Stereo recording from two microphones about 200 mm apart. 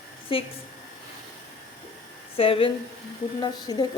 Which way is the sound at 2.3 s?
30° left (ahead or behind).